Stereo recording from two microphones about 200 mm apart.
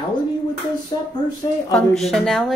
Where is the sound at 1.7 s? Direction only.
Centre (ahead or behind).